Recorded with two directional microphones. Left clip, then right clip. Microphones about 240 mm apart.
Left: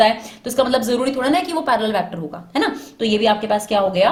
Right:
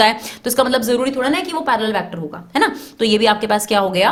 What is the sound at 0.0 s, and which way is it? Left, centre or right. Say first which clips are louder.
A woman's voice: right 1 dB; right.